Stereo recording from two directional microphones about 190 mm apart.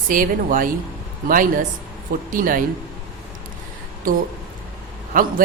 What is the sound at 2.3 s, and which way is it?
Speech, 45° right (ahead or behind).